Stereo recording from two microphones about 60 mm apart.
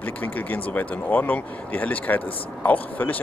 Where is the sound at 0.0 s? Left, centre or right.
Left.